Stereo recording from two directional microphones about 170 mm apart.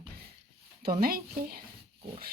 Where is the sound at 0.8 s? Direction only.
60° right (ahead or behind).